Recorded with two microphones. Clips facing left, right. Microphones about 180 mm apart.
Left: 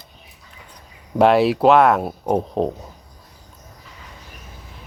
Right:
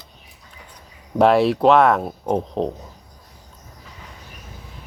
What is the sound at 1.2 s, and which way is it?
Speech, centre (ahead or behind).